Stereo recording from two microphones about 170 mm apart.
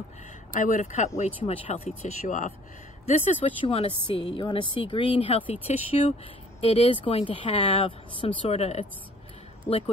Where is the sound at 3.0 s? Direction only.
35° left (ahead or behind).